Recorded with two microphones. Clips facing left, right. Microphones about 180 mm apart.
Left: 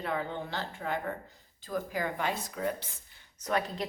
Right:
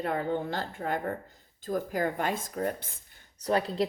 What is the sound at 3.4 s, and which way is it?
Speech, 30° right (ahead or behind).